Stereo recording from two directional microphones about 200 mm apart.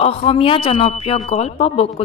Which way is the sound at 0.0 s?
30° left (ahead or behind).